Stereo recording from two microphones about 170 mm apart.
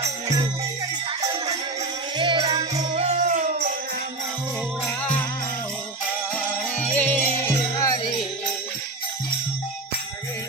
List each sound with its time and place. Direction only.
2.1 s music: 30° right (ahead or behind)
2.7 s music: 40° right (ahead or behind)
6.9 s music: 10° left (ahead or behind)